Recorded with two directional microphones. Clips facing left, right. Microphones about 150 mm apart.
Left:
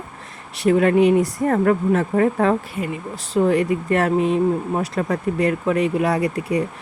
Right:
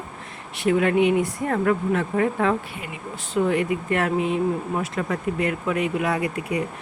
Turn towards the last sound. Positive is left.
turn(degrees=35)  # may be behind; listen again after turning